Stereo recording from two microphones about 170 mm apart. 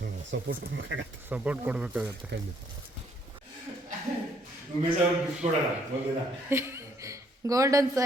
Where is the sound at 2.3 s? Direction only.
90° right.